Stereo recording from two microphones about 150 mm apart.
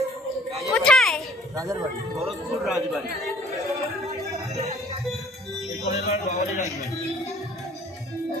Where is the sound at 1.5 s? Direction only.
20° right (ahead or behind).